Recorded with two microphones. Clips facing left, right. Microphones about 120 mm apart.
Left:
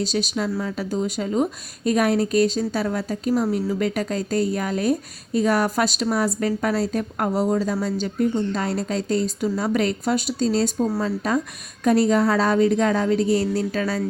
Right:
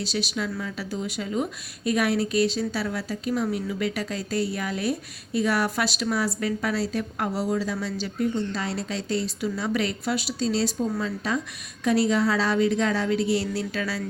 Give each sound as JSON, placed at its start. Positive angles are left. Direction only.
{"t": 0.0, "sound": "speech", "side_deg": 40}